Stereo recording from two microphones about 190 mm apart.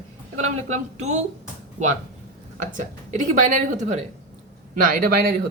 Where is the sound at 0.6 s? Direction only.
35° right (ahead or behind).